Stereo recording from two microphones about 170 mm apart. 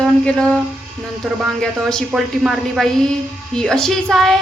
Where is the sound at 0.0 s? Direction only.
5° left (ahead or behind).